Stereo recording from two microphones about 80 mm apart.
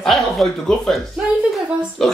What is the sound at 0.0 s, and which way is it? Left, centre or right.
Speech, centre.